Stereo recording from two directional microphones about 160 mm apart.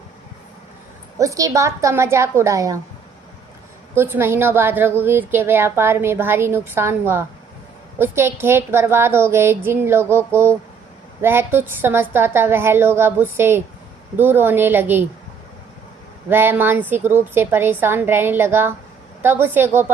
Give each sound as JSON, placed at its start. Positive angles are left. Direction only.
{"t": 1.2, "sound": "a woman's voice", "side_deg": -20}
{"t": 3.9, "sound": "a woman's voice", "side_deg": -15}
{"t": 16.3, "sound": "a woman's voice", "side_deg": -15}